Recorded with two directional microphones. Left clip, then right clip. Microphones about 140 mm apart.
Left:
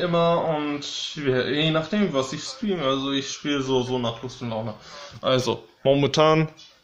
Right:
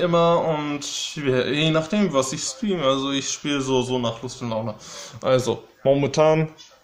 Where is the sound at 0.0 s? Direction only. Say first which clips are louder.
Right 3 dB; 35° right (ahead or behind).